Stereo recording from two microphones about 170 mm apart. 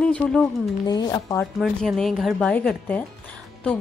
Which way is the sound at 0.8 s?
25° left (ahead or behind).